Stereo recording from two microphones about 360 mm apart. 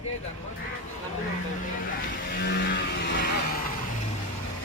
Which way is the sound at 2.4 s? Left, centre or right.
Left.